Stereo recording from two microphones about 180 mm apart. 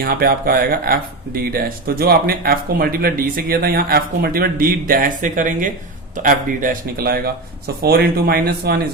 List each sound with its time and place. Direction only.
0.0 s speech: 55° right (ahead or behind)